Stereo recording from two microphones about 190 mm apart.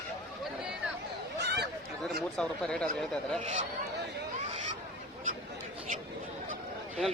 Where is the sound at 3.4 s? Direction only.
35° right (ahead or behind).